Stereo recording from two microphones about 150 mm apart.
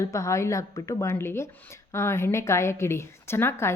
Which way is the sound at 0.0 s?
20° left (ahead or behind).